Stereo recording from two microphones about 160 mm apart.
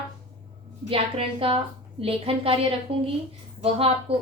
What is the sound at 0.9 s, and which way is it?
A woman's voice, 35° right (ahead or behind).